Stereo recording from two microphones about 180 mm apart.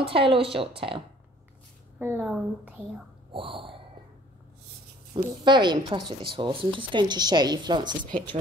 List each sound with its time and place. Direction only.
0.0 s speech: 30° right (ahead or behind)
2.0 s speech: 10° right (ahead or behind)
3.3 s a sound: 30° right (ahead or behind)
5.1 s speech: 25° right (ahead or behind)